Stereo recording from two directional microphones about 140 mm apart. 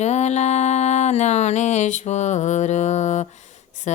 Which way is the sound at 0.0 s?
55° left (ahead or behind).